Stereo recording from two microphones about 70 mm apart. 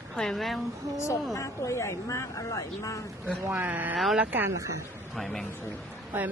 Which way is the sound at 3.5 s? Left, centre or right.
Right.